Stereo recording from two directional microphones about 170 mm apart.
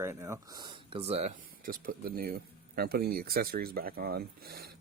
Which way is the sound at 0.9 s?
35° right (ahead or behind).